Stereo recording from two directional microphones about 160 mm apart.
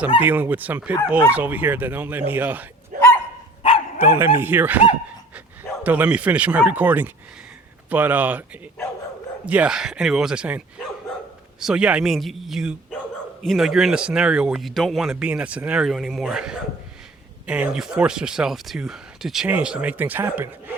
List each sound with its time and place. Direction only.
0.2 s speech: 10° right (ahead or behind)
2.9 s dog: 60° right (ahead or behind)
3.9 s speech: 15° right (ahead or behind)
5.8 s speech: 10° right (ahead or behind)
9.5 s speech: 5° right (ahead or behind)
11.6 s speech: 5° right (ahead or behind)